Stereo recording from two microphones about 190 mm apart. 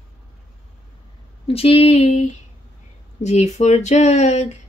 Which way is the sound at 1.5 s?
30° left (ahead or behind).